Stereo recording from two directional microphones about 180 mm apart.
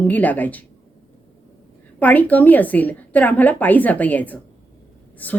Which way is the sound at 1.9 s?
10° left (ahead or behind).